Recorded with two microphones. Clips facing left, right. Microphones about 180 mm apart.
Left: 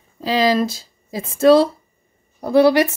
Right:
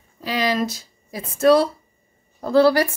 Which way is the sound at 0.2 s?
30° left (ahead or behind).